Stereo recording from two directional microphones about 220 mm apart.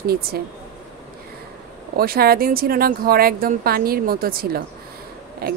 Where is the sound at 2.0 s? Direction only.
45° right (ahead or behind).